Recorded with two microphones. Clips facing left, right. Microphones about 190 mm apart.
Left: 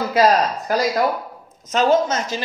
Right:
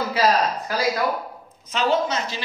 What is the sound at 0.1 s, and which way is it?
A woman's voice, 45° left (ahead or behind).